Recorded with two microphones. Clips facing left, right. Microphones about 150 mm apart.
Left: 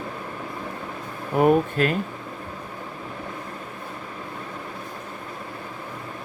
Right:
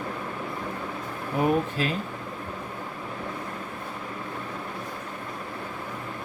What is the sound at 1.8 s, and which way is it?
Speech, 55° left (ahead or behind).